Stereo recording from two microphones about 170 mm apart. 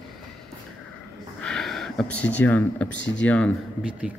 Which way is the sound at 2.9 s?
90° left.